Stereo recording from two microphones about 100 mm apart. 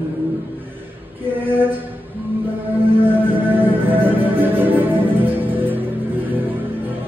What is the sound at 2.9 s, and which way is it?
Music, 20° right (ahead or behind).